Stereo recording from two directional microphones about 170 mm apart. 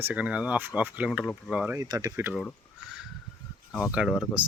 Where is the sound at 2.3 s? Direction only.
Centre (ahead or behind).